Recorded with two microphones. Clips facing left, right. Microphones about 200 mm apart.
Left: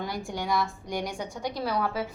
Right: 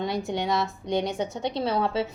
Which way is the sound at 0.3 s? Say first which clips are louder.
Right 3 dB; 25° right (ahead or behind).